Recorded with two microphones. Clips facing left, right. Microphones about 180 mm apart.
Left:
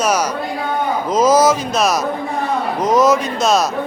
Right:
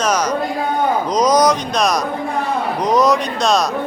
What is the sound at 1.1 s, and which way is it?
Speech, 5° left (ahead or behind).